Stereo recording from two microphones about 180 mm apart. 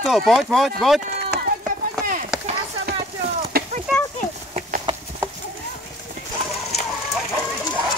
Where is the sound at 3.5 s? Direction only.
55° right (ahead or behind).